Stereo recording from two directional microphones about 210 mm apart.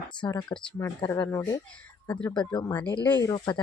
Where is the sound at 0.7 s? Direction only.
10° left (ahead or behind).